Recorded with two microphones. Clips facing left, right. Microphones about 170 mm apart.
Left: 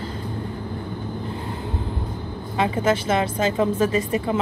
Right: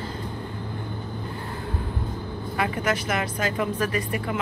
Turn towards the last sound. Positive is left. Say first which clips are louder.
# left 5 dB
turn(degrees=25)  # may be behind; listen again after turning